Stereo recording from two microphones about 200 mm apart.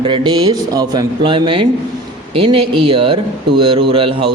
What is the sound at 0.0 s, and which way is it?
Speech, 25° right (ahead or behind).